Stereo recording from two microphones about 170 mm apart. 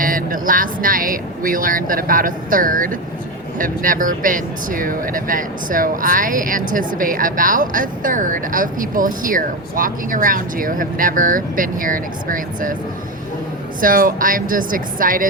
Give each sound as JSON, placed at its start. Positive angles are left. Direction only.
{"t": 0.0, "sound": "speech", "side_deg": -55}
{"t": 13.8, "sound": "speech", "side_deg": -55}